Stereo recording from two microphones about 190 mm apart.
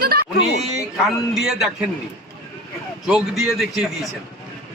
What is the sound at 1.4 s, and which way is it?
Speech, centre (ahead or behind).